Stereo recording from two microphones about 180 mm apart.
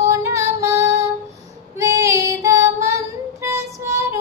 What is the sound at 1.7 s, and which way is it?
Child singing, 15° right (ahead or behind).